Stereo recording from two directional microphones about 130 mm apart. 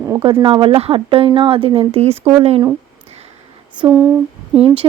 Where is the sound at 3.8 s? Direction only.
40° right (ahead or behind).